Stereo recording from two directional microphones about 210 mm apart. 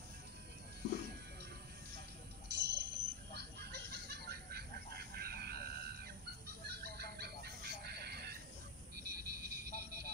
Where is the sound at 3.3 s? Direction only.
50° right (ahead or behind).